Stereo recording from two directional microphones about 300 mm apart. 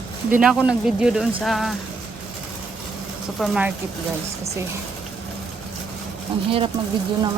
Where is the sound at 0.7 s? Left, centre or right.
Centre.